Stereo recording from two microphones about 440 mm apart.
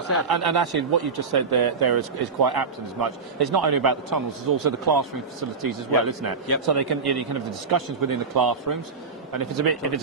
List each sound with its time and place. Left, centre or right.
0.2 s a man's voice: right